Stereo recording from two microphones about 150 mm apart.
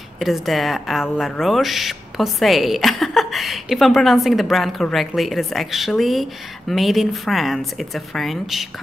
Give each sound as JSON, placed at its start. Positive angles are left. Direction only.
{"t": 0.2, "sound": "a woman's voice", "side_deg": 0}